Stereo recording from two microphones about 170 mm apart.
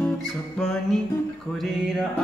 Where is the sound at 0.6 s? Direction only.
5° left (ahead or behind).